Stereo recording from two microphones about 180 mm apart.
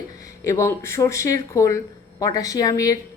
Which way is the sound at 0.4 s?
15° left (ahead or behind).